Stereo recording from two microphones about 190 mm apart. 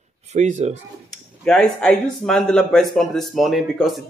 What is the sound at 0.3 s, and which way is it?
Speech, 40° right (ahead or behind).